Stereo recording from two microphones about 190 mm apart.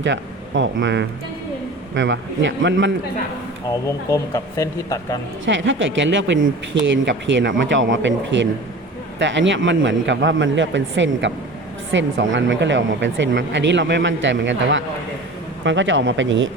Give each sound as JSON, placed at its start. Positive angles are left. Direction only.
{"t": 0.0, "sound": "speech", "side_deg": -75}
{"t": 3.8, "sound": "speech", "side_deg": 15}
{"t": 5.5, "sound": "speech", "side_deg": -80}